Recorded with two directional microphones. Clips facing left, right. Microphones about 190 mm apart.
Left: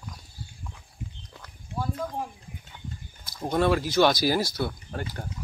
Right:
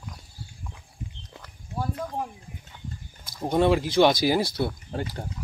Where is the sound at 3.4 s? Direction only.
15° right (ahead or behind).